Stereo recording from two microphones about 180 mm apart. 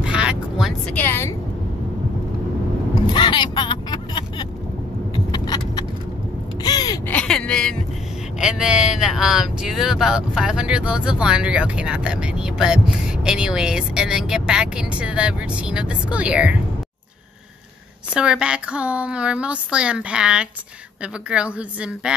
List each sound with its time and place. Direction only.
0.0 s vehicle: 5° right (ahead or behind)
0.9 s a woman's voice: 10° left (ahead or behind)
3.1 s vehicle: 25° left (ahead or behind)
6.6 s a sound: 20° left (ahead or behind)
7.1 s a sound: 5° left (ahead or behind)
8.4 s speech: 5° right (ahead or behind)
18.1 s speech: 5° right (ahead or behind)